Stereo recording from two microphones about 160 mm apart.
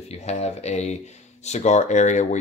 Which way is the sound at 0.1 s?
40° left (ahead or behind).